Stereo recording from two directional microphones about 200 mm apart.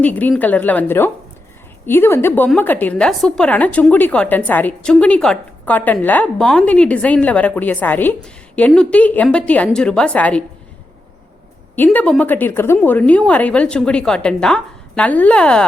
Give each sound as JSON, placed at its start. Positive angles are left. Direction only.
{"t": 0.0, "sound": "a woman's voice", "side_deg": 5}
{"t": 11.8, "sound": "a woman's voice", "side_deg": 5}